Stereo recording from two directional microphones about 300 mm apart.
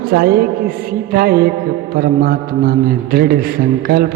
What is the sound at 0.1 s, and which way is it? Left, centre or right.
Mantra, right.